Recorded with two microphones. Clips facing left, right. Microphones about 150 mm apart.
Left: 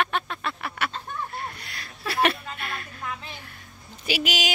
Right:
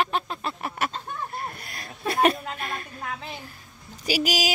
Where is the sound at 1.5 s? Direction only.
50° right (ahead or behind).